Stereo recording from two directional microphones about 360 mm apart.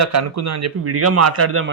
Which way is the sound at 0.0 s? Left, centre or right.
Right.